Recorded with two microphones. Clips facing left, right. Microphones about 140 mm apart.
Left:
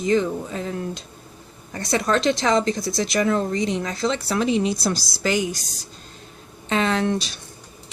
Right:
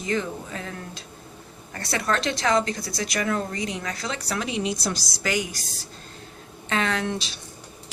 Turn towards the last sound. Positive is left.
turn(degrees=25)  # may be behind; listen again after turning